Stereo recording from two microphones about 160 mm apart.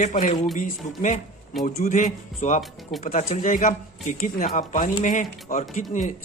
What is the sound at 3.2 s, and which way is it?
A man's voice, 50° left (ahead or behind).